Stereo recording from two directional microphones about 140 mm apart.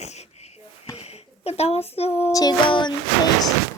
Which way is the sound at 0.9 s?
45° left (ahead or behind).